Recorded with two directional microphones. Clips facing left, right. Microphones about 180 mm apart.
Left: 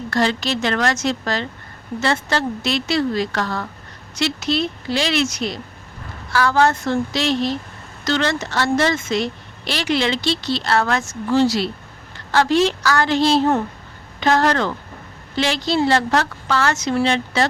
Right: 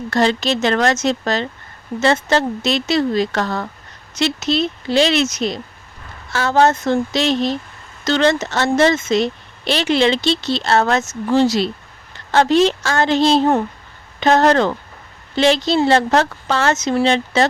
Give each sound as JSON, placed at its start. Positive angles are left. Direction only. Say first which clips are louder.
{"t": 0.1, "sound": "speech", "louder": "right 3 dB", "side_deg": -20}